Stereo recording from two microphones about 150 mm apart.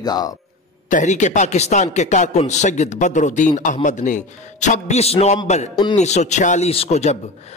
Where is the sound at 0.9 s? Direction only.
55° left (ahead or behind).